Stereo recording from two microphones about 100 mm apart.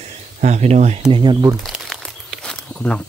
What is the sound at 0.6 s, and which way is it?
Speech, 90° right.